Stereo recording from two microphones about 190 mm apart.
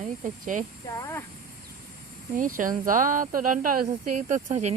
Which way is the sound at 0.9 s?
15° left (ahead or behind).